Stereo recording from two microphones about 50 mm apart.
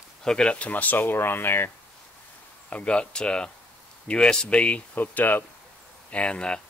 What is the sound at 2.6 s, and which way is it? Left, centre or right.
Speech, left.